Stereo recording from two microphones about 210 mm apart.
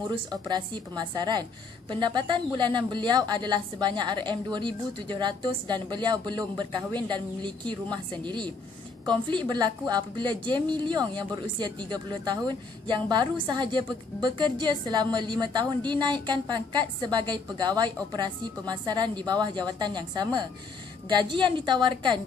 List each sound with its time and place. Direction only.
0.1 s a woman's voice: 20° right (ahead or behind)